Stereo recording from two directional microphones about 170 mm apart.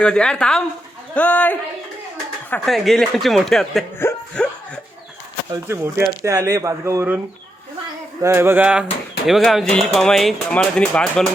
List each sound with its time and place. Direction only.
0.0 s speech: 5° left (ahead or behind)
3.9 s a sound: 10° left (ahead or behind)
5.6 s speech: 15° right (ahead or behind)
8.2 s speech: 15° right (ahead or behind); by 11.3 s 5° left (ahead or behind)